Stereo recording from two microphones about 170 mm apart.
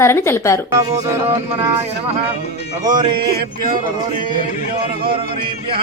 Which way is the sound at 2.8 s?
25° right (ahead or behind).